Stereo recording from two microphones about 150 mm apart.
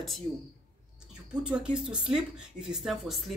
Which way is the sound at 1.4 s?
5° right (ahead or behind).